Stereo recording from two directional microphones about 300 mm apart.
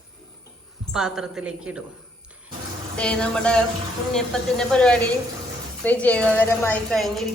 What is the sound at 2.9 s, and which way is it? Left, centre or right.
A woman's voice, centre.